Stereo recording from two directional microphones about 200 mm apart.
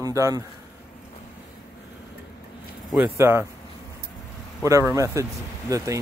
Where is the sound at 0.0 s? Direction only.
15° right (ahead or behind).